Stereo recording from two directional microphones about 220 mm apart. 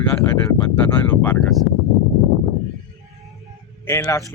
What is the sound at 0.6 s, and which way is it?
Speech, 10° left (ahead or behind).